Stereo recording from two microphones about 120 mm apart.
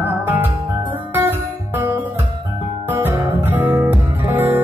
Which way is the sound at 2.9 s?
15° right (ahead or behind).